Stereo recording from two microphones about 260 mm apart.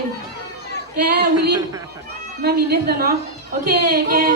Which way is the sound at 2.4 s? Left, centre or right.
Right.